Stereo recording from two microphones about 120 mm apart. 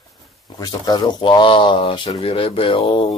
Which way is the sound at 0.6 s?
35° left (ahead or behind).